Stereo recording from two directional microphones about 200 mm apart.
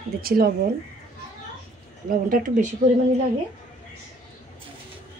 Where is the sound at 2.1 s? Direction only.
45° right (ahead or behind).